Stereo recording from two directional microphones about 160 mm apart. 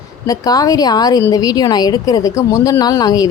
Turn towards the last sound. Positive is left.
turn(degrees=25)  # may be behind; listen again after turning